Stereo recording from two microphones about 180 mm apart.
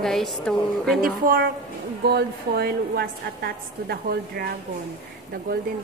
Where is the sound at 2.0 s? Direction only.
65° right (ahead or behind).